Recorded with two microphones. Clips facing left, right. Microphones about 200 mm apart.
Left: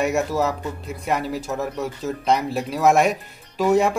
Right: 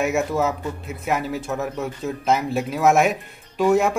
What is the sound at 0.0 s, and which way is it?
Speech, centre (ahead or behind).